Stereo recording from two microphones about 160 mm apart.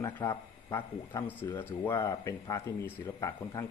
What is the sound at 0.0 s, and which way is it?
Speech, 20° left (ahead or behind).